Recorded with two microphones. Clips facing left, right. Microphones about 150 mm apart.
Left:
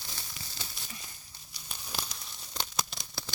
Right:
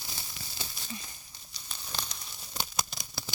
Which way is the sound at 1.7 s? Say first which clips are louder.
Left 1 dB; 10° left (ahead or behind).